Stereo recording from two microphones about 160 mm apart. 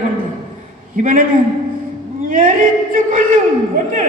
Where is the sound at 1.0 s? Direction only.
55° right (ahead or behind).